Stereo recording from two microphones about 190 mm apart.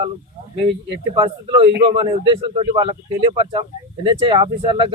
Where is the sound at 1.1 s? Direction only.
25° right (ahead or behind).